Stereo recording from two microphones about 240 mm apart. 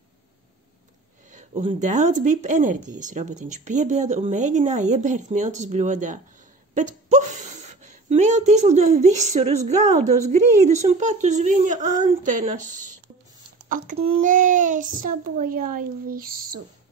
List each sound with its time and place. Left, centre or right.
1.3 s a child's voice: right